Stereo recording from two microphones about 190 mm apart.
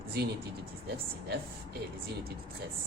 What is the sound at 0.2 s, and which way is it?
Speech, 60° right (ahead or behind).